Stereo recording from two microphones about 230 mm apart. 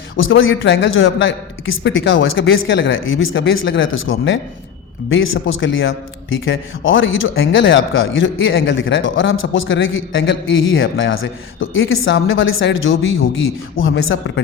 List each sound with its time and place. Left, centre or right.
0.2 s speech: left